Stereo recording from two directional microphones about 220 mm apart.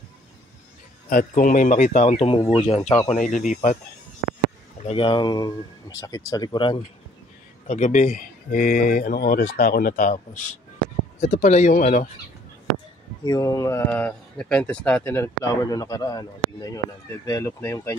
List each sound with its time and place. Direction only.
1.0 s speech: 40° left (ahead or behind)
4.8 s speech: 25° left (ahead or behind)
7.6 s speech: 35° left (ahead or behind)
13.2 s speech: 15° left (ahead or behind)